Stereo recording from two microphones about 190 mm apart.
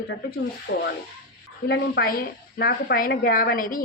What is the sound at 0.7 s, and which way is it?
A woman's voice, 65° left (ahead or behind).